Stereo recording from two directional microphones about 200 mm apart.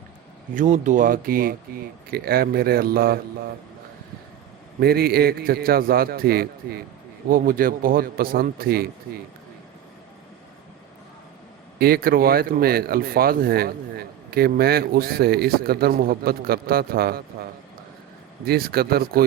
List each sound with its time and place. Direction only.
0.5 s speech: 40° right (ahead or behind)
4.8 s speech: 50° right (ahead or behind)
11.8 s speech: 45° right (ahead or behind)
18.4 s speech: 50° right (ahead or behind)